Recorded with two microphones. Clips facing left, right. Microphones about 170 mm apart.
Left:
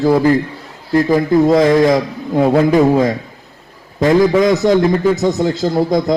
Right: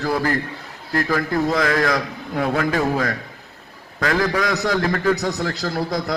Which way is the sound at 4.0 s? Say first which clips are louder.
Left 10 dB; 20° left (ahead or behind).